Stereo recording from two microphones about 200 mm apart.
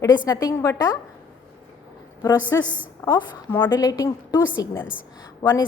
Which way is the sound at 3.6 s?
20° left (ahead or behind).